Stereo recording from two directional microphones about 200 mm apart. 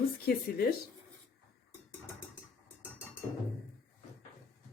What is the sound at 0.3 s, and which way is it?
Speech, 50° left (ahead or behind).